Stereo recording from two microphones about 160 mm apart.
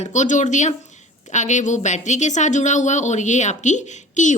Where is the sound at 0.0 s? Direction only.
50° left (ahead or behind).